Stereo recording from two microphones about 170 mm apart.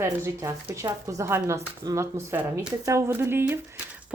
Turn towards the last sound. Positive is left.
turn(degrees=-15)  # may be behind; listen again after turning